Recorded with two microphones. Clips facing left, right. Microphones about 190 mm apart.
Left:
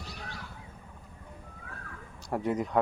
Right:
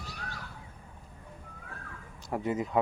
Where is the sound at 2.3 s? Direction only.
Centre (ahead or behind).